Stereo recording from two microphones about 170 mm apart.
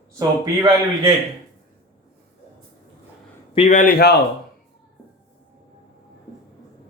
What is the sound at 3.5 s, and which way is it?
Speech, 40° left (ahead or behind).